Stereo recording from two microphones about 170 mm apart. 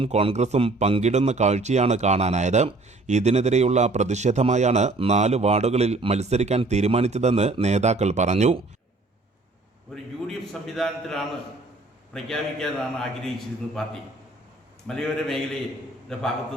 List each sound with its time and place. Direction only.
0.0 s a man's voice: 35° right (ahead or behind)
9.9 s a man's voice: 5° left (ahead or behind)